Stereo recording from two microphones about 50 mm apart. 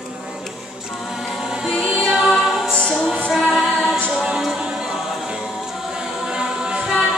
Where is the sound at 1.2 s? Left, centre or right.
Centre.